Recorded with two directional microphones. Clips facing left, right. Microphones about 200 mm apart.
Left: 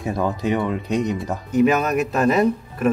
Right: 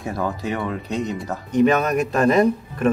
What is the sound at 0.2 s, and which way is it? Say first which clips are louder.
Speech: left 4 dB; 20° left (ahead or behind).